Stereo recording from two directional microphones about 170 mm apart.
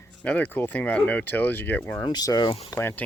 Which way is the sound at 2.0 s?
25° left (ahead or behind).